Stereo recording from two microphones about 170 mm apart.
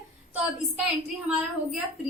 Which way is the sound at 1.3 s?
10° right (ahead or behind).